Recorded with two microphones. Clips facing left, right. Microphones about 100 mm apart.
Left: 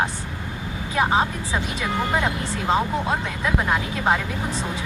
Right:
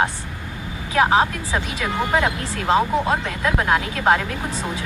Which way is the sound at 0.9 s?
90° right.